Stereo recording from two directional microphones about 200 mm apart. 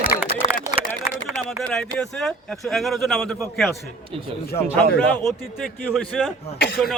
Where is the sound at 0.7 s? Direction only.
35° left (ahead or behind).